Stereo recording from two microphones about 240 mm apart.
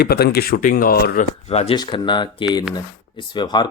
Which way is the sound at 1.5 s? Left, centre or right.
Left.